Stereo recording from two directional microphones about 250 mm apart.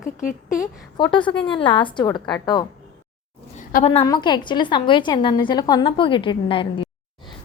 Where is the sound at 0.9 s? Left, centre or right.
Centre.